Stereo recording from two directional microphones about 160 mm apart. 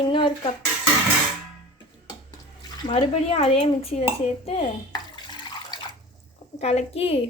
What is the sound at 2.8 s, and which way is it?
Speech, 35° left (ahead or behind).